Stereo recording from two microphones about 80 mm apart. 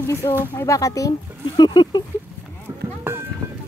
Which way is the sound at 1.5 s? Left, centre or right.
Left.